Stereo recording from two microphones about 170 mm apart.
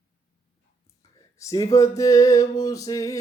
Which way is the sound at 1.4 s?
20° left (ahead or behind).